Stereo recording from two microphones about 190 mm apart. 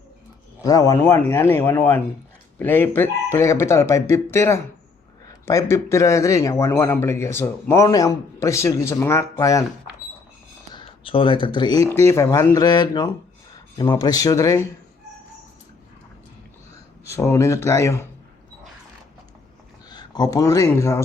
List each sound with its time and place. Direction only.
0.6 s speech: 15° left (ahead or behind)
10.8 s speech: 25° left (ahead or behind)
17.1 s speech: 15° left (ahead or behind)
19.9 s speech: 20° left (ahead or behind)